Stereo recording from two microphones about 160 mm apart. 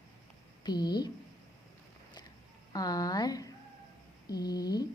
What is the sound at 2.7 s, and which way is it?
A woman's voice, 25° left (ahead or behind).